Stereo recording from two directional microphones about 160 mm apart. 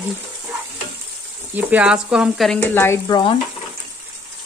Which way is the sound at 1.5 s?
10° right (ahead or behind).